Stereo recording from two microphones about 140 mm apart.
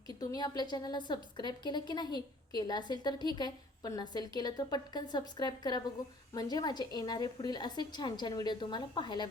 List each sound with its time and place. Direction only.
0.2 s a woman's voice: 25° left (ahead or behind)